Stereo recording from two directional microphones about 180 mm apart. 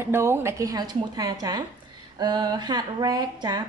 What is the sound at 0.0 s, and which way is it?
A woman's voice, 15° right (ahead or behind).